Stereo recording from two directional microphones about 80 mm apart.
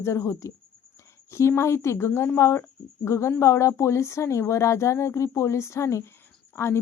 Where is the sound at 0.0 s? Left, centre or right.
Left.